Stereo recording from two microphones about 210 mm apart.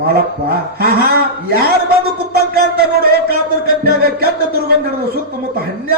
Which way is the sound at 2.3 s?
50° right (ahead or behind).